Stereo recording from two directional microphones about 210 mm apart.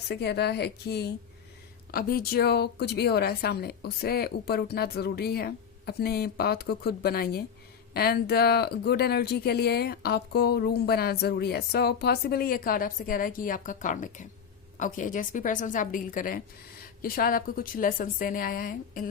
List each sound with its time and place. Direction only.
0.1 s a woman's voice: 50° left (ahead or behind)